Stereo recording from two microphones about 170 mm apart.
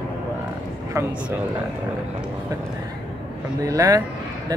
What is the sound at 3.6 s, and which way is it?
Speech, 20° right (ahead or behind).